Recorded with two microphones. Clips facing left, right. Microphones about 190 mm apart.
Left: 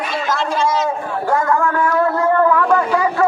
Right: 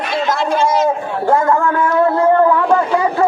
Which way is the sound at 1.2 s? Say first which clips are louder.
Right 3 dB; 25° right (ahead or behind).